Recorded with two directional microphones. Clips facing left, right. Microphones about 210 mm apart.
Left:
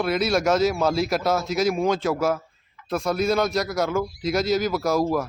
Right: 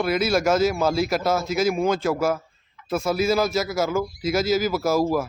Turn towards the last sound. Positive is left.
turn(degrees=-5)  # may be behind; listen again after turning